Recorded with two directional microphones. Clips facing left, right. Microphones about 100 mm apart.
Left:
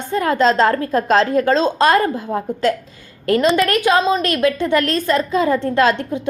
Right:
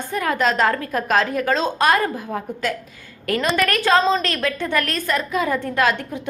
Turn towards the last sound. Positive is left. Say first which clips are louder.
# left 4 dB
turn(degrees=25)  # may be behind; listen again after turning